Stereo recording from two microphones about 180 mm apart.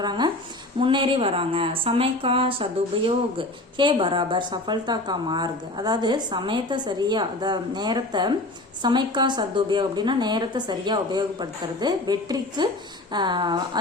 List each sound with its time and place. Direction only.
0.0 s speech: 25° right (ahead or behind)